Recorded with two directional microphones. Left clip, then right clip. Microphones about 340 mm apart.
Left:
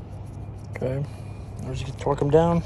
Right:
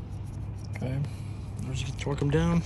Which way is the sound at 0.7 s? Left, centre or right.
Centre.